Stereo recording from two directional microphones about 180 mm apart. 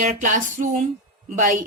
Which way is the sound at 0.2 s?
45° right (ahead or behind).